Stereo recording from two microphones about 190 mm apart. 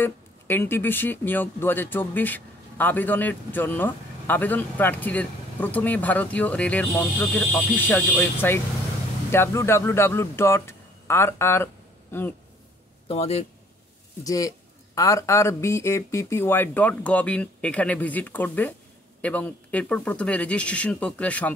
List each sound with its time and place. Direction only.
0.0 s a man's voice: 10° left (ahead or behind)
13.1 s speech: 30° left (ahead or behind)
14.2 s speech: 20° left (ahead or behind)